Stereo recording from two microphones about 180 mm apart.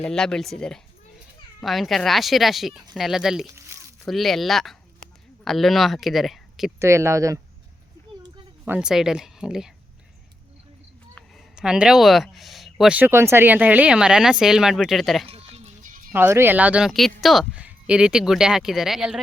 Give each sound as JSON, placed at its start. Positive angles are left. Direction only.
{"t": 0.0, "sound": "speech", "side_deg": 5}
{"t": 3.5, "sound": "a sound", "side_deg": -15}
{"t": 4.0, "sound": "speech", "side_deg": 0}
{"t": 6.7, "sound": "speech", "side_deg": -15}
{"t": 8.6, "sound": "speech", "side_deg": -5}
{"t": 11.5, "sound": "speech", "side_deg": -5}
{"t": 15.3, "sound": "music", "side_deg": -35}
{"t": 16.1, "sound": "speech", "side_deg": -10}